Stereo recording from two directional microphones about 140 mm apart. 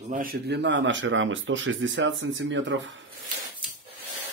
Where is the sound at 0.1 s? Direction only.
85° right.